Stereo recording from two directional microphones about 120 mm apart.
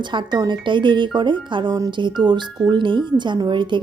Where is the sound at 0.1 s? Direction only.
40° right (ahead or behind).